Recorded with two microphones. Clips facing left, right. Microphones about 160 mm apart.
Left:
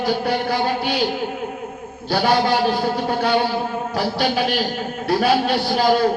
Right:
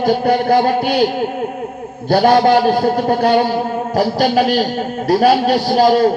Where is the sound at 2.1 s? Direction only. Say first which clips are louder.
Right 7 dB; 50° right (ahead or behind).